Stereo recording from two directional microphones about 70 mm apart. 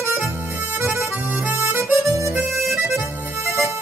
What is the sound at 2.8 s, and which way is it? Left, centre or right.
Accordion, right.